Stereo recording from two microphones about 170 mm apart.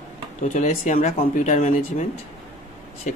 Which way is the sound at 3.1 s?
45° left (ahead or behind).